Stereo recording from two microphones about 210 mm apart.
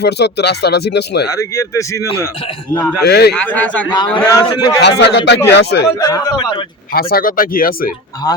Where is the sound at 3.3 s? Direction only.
5° left (ahead or behind).